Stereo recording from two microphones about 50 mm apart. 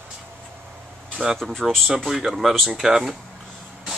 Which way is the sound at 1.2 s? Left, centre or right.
Right.